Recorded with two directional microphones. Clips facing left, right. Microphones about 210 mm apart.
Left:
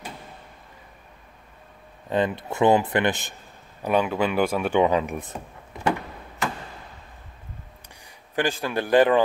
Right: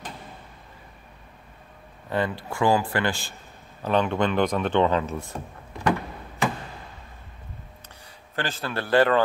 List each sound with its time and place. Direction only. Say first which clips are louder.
2.0 s a man's voice: left 3 dB; 20° left (ahead or behind)
3.8 s speech: even; 10° left (ahead or behind)
8.4 s speech: left 5 dB; 15° left (ahead or behind)